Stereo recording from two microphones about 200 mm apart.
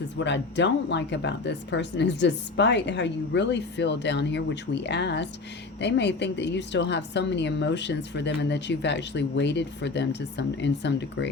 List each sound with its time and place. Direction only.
0.2 s a woman's voice: 60° left (ahead or behind)